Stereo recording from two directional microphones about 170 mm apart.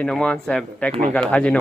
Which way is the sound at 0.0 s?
5° left (ahead or behind).